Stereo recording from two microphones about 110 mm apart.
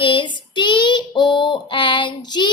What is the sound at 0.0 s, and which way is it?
Child singing, 50° left (ahead or behind).